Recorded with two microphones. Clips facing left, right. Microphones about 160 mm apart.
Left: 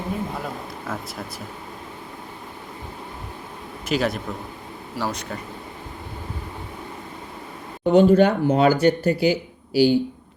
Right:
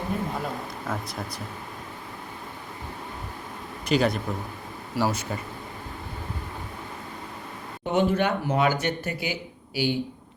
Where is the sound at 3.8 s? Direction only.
Centre (ahead or behind).